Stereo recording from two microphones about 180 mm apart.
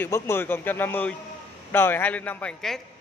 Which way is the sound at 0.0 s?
10° left (ahead or behind).